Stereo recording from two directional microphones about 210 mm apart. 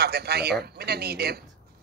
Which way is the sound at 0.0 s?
50° right (ahead or behind).